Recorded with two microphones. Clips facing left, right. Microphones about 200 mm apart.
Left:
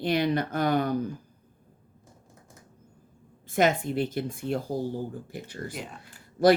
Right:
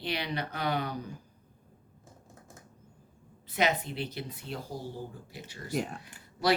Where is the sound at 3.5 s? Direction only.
50° left (ahead or behind).